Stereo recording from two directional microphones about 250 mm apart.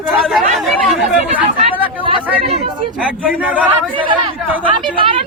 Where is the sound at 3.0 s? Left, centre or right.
Centre.